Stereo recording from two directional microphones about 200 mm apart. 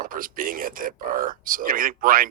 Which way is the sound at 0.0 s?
45° right (ahead or behind).